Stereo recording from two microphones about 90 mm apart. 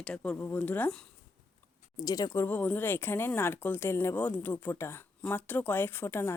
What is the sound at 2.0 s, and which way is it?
Speech, 40° left (ahead or behind).